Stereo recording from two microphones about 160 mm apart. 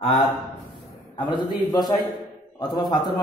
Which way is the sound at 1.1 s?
30° left (ahead or behind).